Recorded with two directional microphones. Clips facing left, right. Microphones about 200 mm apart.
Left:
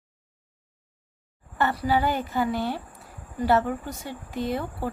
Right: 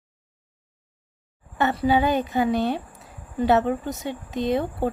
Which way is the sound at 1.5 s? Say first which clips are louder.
Right 3 dB; 20° right (ahead or behind).